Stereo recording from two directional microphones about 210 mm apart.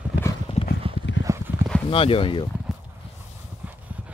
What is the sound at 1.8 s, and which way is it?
Speech, 25° left (ahead or behind).